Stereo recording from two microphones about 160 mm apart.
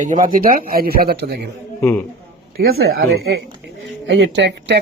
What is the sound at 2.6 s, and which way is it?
Speech, 80° right.